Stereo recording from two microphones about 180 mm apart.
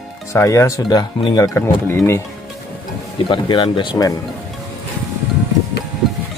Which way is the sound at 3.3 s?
30° left (ahead or behind).